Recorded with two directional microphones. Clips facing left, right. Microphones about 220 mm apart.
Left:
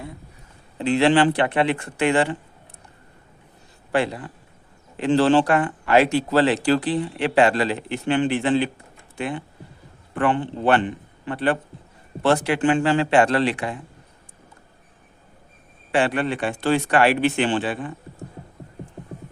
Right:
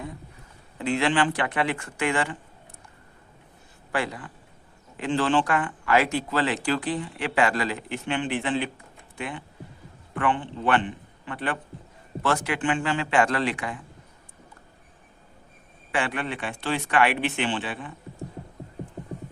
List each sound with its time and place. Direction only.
0.8 s speech: 30° left (ahead or behind)
3.9 s a man's voice: 25° left (ahead or behind)
15.9 s a man's voice: 30° left (ahead or behind)